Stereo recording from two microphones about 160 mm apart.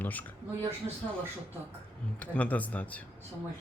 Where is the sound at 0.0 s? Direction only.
10° left (ahead or behind).